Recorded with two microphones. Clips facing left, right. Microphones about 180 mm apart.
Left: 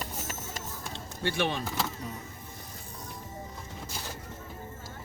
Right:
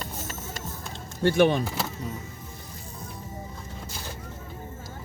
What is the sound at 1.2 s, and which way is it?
Speech, 45° right (ahead or behind).